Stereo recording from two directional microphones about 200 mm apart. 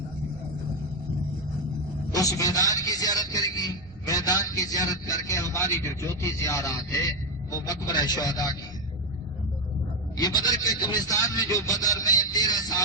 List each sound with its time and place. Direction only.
2.1 s a sound: 15° left (ahead or behind)
7.5 s a man's voice: 20° left (ahead or behind)
10.2 s a man's voice: 20° left (ahead or behind)